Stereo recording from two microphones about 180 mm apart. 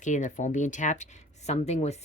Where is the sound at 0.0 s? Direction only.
45° left (ahead or behind).